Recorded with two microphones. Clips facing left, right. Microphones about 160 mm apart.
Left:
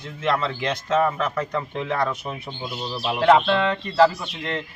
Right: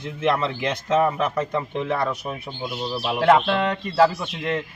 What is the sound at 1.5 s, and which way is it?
A man's voice, 5° right (ahead or behind).